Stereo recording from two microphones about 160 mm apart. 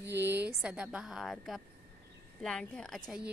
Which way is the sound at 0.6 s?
5° right (ahead or behind).